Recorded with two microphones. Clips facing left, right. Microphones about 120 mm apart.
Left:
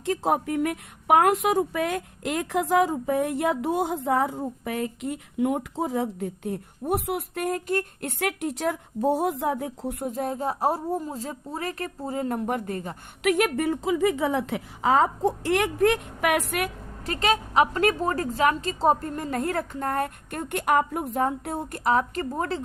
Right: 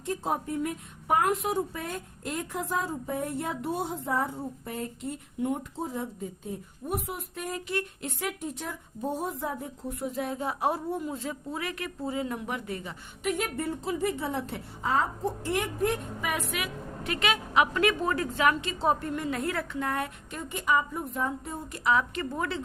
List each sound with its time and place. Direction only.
0.0 s speech: 90° left; by 7.9 s 50° left (ahead or behind)
8.0 s speech: 70° left (ahead or behind)
10.1 s a woman's voice: 40° left (ahead or behind)
13.2 s speech: 90° left; by 16.7 s 55° left (ahead or behind)
17.0 s a woman's voice: 35° left (ahead or behind); by 21.8 s 65° left (ahead or behind)
21.8 s a woman's voice: 40° left (ahead or behind)